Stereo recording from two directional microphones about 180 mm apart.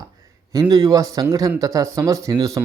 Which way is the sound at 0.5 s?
20° right (ahead or behind).